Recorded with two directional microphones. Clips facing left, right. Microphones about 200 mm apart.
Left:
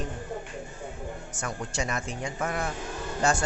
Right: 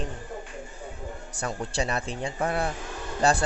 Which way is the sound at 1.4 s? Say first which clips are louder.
Right 3 dB; 35° right (ahead or behind).